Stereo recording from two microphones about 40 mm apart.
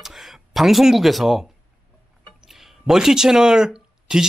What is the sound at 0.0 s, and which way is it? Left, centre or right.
Speech, centre.